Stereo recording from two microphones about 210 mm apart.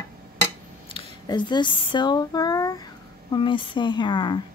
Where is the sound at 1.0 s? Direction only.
20° left (ahead or behind).